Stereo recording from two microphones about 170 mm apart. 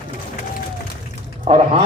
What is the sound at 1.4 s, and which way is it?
Speech, 35° right (ahead or behind).